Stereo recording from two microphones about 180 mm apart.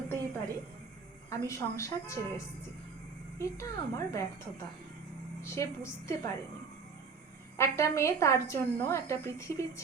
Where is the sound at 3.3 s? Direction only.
15° left (ahead or behind).